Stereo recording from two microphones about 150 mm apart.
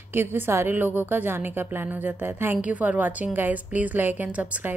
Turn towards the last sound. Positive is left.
turn(degrees=-10)  # may be behind; listen again after turning